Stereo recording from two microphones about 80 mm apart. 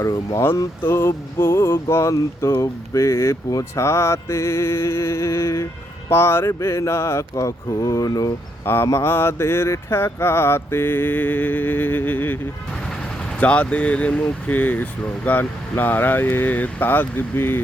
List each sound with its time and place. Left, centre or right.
0.3 s speech: left
8.6 s speech: left
13.4 s speech: centre